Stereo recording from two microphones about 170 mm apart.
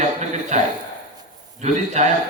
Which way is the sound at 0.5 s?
40° right (ahead or behind).